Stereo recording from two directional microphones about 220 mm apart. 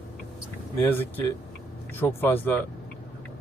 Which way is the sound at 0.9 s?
10° left (ahead or behind).